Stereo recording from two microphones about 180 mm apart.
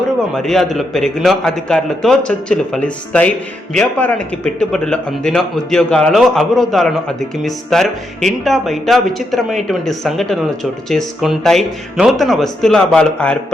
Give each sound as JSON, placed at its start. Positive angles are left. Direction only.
{"t": 0.3, "sound": "speech", "side_deg": 0}